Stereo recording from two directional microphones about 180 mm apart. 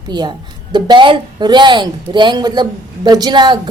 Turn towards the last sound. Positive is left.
turn(degrees=-25)  # may be behind; listen again after turning